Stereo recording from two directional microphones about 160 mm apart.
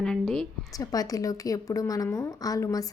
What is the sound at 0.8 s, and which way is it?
A woman's voice, 20° left (ahead or behind).